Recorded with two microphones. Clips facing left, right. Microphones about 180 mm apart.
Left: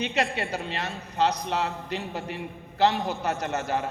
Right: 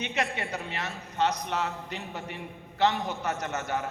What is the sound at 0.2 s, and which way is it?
A man's voice, 30° left (ahead or behind).